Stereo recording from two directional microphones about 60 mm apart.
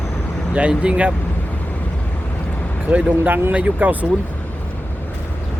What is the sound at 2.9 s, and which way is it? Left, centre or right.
Speech, right.